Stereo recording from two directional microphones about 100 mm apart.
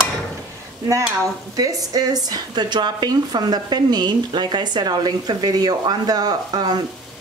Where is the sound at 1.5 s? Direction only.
40° right (ahead or behind).